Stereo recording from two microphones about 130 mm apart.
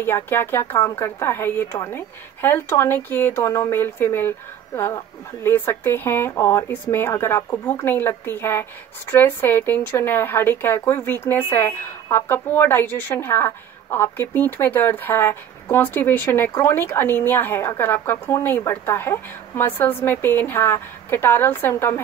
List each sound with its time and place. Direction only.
0.0 s a woman's voice: 15° left (ahead or behind)